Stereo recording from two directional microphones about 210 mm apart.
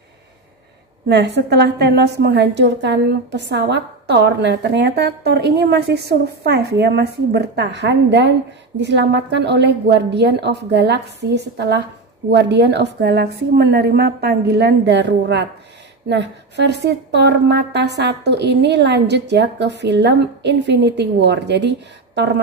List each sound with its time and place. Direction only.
1.0 s a woman's voice: 55° right (ahead or behind)